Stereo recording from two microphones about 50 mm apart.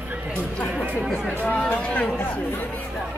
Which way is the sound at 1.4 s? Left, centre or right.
Left.